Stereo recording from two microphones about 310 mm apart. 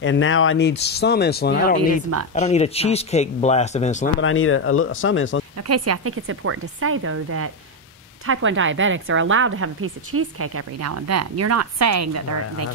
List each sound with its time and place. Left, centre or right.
0.0 s speech: left
4.2 s speech: left
5.6 s a woman's voice: right